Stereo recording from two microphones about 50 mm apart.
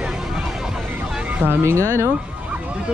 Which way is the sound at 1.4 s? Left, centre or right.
Right.